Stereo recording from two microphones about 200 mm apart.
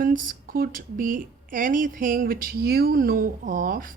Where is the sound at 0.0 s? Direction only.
45° right (ahead or behind).